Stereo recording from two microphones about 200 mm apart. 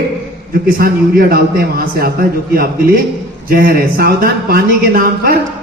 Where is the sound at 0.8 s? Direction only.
45° right (ahead or behind).